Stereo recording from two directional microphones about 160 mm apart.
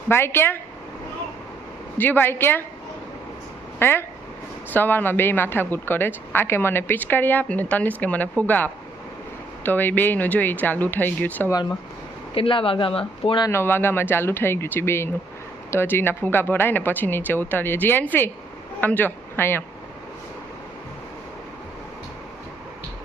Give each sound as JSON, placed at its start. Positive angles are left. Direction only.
{"t": 0.1, "sound": "a woman's voice", "side_deg": 15}
{"t": 2.0, "sound": "a woman's voice", "side_deg": 10}
{"t": 3.8, "sound": "a woman's voice", "side_deg": 15}
{"t": 12.3, "sound": "speech", "side_deg": 35}
{"t": 13.5, "sound": "a woman's voice", "side_deg": 15}